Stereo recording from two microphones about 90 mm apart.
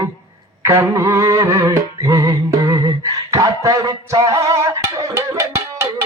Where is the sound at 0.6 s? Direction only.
30° right (ahead or behind).